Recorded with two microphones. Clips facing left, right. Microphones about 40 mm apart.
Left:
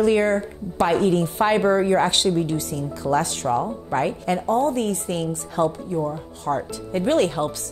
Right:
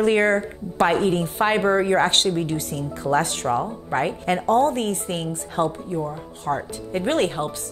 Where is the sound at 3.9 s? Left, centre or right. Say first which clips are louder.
Even; right.